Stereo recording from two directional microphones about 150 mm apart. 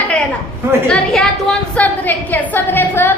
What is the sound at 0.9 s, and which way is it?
A child's voice, 5° left (ahead or behind).